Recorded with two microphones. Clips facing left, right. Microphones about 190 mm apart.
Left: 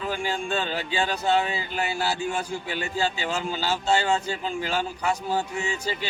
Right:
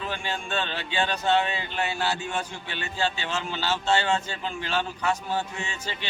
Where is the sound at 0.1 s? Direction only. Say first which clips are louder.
Left 6 dB; 10° left (ahead or behind).